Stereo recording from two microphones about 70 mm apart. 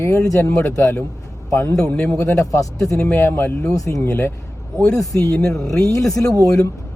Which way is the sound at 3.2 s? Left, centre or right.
Left.